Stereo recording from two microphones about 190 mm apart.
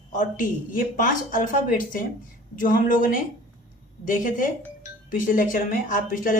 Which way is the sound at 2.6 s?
45° left (ahead or behind).